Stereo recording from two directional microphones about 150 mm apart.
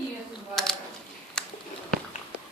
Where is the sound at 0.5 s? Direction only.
5° left (ahead or behind).